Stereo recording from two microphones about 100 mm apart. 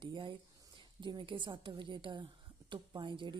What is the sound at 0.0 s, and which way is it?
Speech, 55° right (ahead or behind).